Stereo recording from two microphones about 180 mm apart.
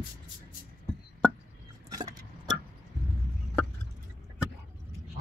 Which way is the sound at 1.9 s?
20° right (ahead or behind).